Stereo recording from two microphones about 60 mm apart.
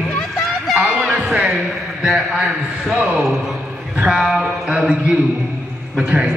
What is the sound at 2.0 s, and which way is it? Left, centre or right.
A man's voice, centre.